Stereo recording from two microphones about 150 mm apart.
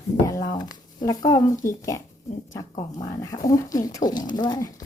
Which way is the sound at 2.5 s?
25° left (ahead or behind).